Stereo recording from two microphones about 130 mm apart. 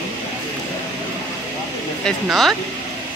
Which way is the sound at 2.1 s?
Centre (ahead or behind).